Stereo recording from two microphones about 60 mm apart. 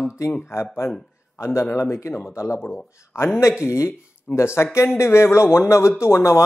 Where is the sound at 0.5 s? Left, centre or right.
Left.